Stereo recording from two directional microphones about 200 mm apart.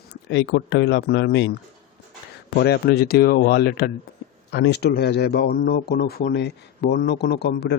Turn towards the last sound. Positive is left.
turn(degrees=55)  # may be behind; listen again after turning